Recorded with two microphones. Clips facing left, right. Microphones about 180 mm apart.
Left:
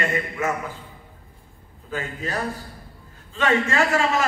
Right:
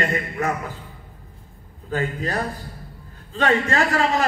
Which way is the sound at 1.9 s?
35° right (ahead or behind).